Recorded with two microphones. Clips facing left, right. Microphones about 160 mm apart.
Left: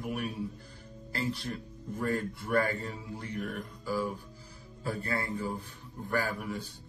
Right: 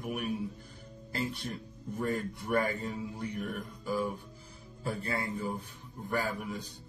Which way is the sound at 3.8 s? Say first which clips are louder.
Even; 15° right (ahead or behind).